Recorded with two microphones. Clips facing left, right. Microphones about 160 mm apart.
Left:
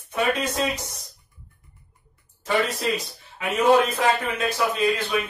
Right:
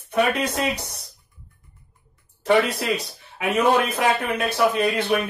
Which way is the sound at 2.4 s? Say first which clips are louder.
Right 4 dB; 65° right (ahead or behind).